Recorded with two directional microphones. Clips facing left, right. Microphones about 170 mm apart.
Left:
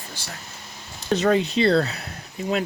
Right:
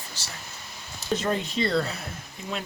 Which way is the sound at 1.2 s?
75° left (ahead or behind).